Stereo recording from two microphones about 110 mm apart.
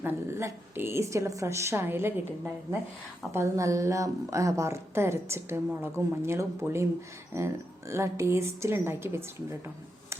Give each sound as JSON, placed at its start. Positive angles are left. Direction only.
{"t": 0.0, "sound": "a woman's voice", "side_deg": -20}